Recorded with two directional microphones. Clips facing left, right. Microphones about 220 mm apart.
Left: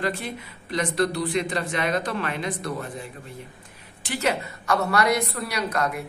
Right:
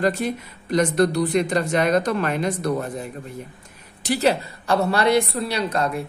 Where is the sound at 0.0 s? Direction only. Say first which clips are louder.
Right 7 dB; 45° right (ahead or behind).